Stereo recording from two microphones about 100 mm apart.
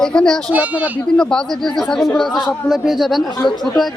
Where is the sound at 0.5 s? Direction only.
15° right (ahead or behind).